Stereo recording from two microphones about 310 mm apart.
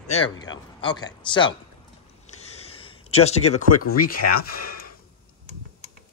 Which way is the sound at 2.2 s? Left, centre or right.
Centre.